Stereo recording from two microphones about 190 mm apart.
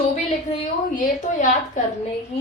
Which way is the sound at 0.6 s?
40° left (ahead or behind).